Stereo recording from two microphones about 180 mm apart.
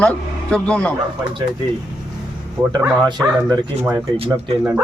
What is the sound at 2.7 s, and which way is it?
Speech, 25° right (ahead or behind).